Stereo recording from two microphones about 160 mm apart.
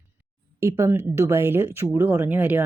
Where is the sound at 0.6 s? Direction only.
15° right (ahead or behind).